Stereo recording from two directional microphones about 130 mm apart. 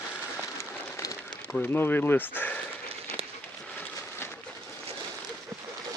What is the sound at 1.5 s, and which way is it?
Speech, 15° left (ahead or behind).